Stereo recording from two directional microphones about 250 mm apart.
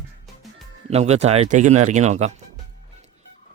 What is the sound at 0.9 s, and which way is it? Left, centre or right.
Speech, right.